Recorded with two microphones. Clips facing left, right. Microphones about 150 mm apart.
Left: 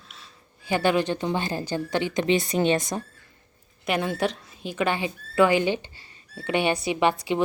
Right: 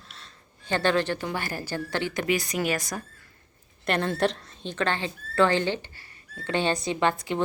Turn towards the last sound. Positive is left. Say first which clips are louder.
# left 3 dB
turn(degrees=15)  # may be behind; listen again after turning